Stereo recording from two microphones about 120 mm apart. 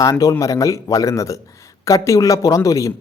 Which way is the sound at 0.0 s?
30° left (ahead or behind).